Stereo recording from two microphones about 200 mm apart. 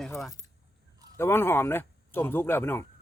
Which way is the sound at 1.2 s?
10° left (ahead or behind).